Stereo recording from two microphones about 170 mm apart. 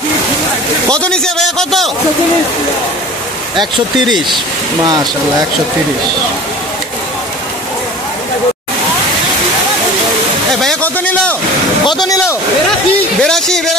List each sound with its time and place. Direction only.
0.9 s a man's voice: 5° left (ahead or behind)
10.5 s a sound: centre (ahead or behind)
11.8 s speech: 25° left (ahead or behind)
13.2 s a man's voice: 5° left (ahead or behind)